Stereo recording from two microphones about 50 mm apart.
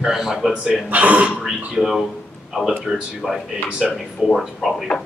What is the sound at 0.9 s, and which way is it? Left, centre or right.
Speech, right.